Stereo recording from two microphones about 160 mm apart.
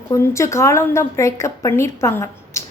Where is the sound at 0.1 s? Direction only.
20° left (ahead or behind).